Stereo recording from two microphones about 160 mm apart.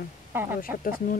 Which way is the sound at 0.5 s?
60° left (ahead or behind).